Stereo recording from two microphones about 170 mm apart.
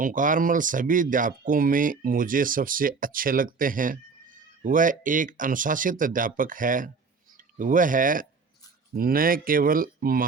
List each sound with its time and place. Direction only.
0.0 s speech: 50° right (ahead or behind)